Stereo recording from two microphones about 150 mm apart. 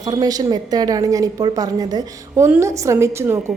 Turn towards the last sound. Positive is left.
turn(degrees=-20)  # may be behind; listen again after turning